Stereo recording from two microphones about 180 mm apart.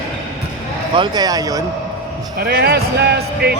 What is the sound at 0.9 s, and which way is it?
Speech, 25° right (ahead or behind).